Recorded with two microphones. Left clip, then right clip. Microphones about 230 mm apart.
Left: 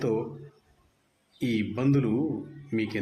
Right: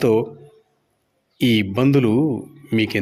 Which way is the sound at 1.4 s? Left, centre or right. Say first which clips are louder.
Right 10 dB; right.